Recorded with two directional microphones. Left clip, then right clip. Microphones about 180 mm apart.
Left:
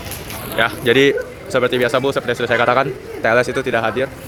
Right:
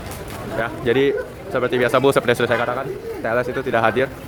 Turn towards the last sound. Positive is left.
turn(degrees=-10)  # may be behind; listen again after turning